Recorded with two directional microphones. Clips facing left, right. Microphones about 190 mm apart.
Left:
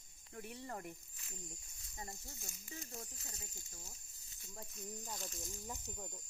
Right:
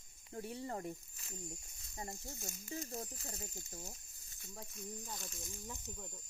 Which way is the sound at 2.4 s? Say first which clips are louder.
Right 7 dB; 45° right (ahead or behind).